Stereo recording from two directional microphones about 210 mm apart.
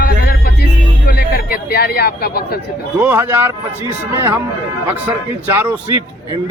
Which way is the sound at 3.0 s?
10° right (ahead or behind).